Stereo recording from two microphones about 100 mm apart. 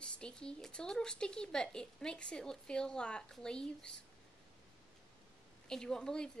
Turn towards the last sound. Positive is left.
turn(degrees=5)  # may be behind; listen again after turning